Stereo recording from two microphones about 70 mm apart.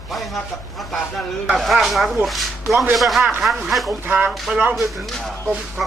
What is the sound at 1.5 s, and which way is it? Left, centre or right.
Speech, centre.